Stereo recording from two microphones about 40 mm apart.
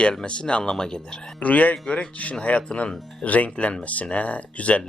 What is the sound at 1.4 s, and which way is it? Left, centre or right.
Speech, left.